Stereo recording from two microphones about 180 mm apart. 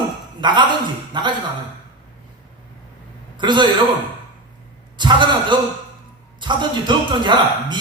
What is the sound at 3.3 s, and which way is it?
Speech, 25° right (ahead or behind).